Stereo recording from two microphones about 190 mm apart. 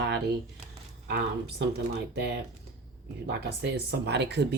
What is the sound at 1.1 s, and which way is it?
Speech, 60° right (ahead or behind).